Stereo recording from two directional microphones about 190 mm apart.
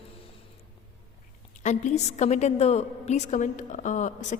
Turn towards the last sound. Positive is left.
turn(degrees=40)  # may be behind; listen again after turning